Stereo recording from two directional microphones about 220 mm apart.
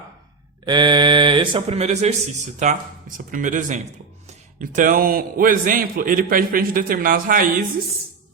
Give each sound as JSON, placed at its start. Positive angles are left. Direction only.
{"t": 0.6, "sound": "a man's voice", "side_deg": -20}